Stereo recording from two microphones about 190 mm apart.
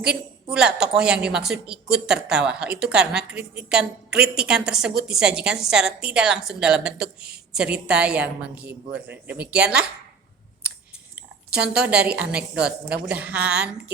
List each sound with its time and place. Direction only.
0.5 s speech: 5° right (ahead or behind)
11.1 s speech: 5° right (ahead or behind)